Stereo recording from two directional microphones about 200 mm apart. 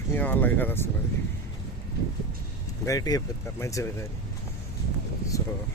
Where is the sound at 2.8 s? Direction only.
15° left (ahead or behind).